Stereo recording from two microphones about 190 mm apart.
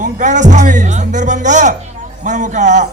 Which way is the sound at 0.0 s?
40° right (ahead or behind).